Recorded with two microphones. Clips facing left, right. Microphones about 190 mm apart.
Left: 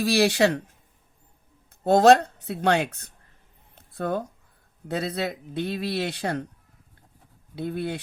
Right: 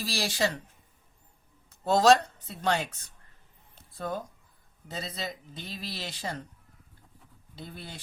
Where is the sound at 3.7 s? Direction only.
65° left (ahead or behind).